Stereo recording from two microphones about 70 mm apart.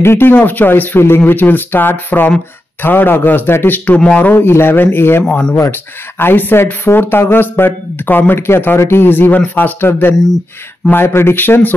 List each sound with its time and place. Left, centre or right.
0.0 s speech: left; by 4.3 s centre
4.3 s speech: left
5.3 s speech: centre
5.6 s speech: left